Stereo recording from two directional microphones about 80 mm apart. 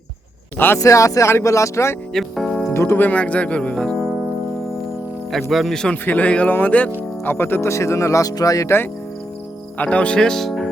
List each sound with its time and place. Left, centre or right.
0.5 s speech: left
0.8 s speech: left
2.1 s music: centre
2.7 s speech: left
5.3 s speech: centre; by 8.9 s left
9.7 s speech: centre